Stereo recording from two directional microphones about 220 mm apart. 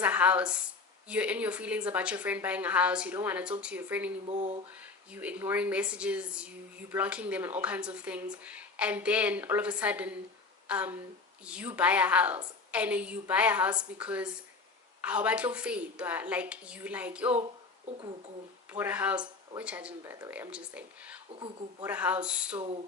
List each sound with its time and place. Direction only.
0.0 s speech: 5° right (ahead or behind)
4.3 s speech: 25° right (ahead or behind)
5.1 s speech: 5° right (ahead or behind)
18.7 s speech: 10° right (ahead or behind)
21.3 s speech: 20° right (ahead or behind)
21.8 s speech: 5° right (ahead or behind)